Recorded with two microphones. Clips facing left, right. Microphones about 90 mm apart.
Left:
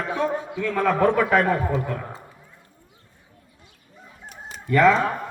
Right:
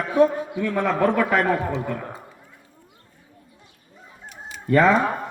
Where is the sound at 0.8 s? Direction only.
Centre (ahead or behind).